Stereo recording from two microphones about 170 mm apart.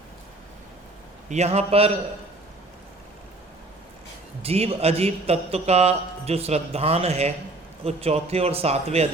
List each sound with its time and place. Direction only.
1.3 s a man's voice: 40° right (ahead or behind)
4.4 s a man's voice: 35° right (ahead or behind)